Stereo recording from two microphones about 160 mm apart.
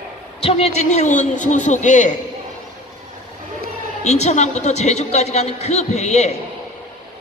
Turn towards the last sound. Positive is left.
turn(degrees=45)  # may be behind; listen again after turning